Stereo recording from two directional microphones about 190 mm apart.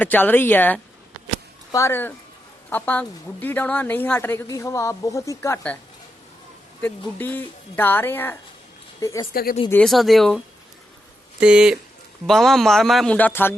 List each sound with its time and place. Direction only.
0.0 s a woman's voice: 10° left (ahead or behind)
7.2 s a woman's voice: 10° left (ahead or behind)
9.3 s speech: 50° left (ahead or behind)
9.6 s speech: 5° left (ahead or behind)